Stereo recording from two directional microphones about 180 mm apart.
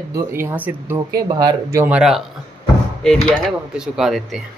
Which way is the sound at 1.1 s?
25° right (ahead or behind).